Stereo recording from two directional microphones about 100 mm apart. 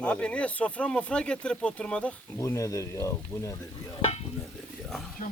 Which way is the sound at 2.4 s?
30° left (ahead or behind).